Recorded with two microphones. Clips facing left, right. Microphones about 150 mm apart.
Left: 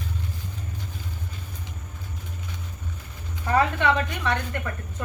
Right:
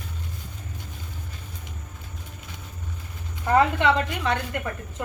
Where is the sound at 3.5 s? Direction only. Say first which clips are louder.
Right 2 dB; 20° right (ahead or behind).